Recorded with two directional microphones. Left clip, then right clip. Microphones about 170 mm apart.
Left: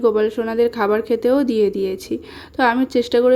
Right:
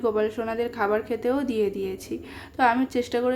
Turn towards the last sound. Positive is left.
turn(degrees=30)  # may be behind; listen again after turning